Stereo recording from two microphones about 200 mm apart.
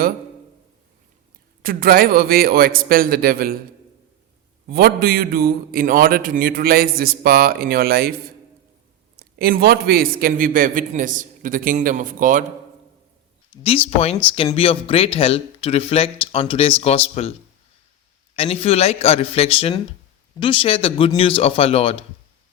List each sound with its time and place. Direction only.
1.6 s a man's voice: 45° right (ahead or behind)
4.7 s a man's voice: 50° right (ahead or behind)
9.1 s a man's voice: 50° right (ahead or behind)
13.6 s speech: 30° left (ahead or behind)
18.3 s speech: 30° left (ahead or behind)